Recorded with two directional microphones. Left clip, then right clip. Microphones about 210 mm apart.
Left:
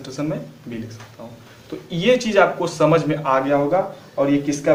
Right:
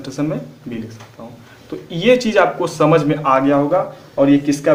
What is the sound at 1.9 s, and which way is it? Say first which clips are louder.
A man's voice: right 3 dB; 35° right (ahead or behind).